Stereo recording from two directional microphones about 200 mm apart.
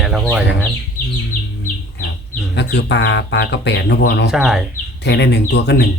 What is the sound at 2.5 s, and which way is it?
Speech, 60° left (ahead or behind).